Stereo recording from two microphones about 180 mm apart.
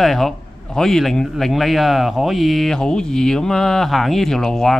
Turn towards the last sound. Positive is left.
turn(degrees=5)  # may be behind; listen again after turning